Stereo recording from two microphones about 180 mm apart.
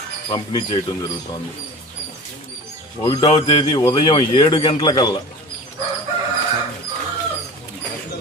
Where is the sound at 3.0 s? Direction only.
25° left (ahead or behind).